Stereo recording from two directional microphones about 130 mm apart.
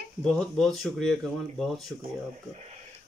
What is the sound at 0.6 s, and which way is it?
Speech, centre (ahead or behind).